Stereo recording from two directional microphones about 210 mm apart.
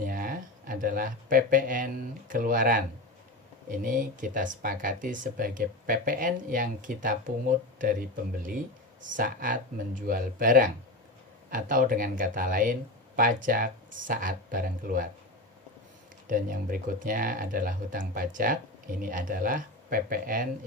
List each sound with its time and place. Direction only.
0.0 s speech: 40° right (ahead or behind)
9.1 s speech: 40° right (ahead or behind)
16.2 s speech: 40° right (ahead or behind)